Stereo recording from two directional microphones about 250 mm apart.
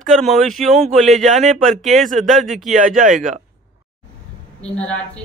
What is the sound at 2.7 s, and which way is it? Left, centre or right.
Speech, right.